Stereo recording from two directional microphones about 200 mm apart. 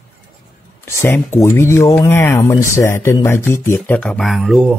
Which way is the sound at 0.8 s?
10° left (ahead or behind).